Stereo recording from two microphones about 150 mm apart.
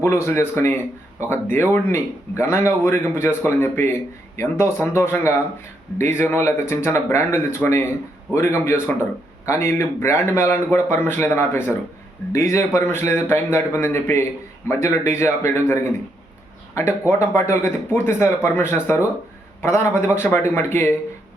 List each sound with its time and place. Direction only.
0.0 s a man's voice: 20° left (ahead or behind)
17.1 s a man's voice: 20° left (ahead or behind)